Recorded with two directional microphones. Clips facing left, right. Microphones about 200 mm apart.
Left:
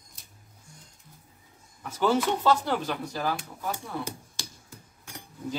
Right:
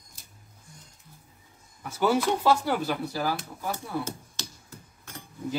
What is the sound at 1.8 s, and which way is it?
Speech, 10° right (ahead or behind).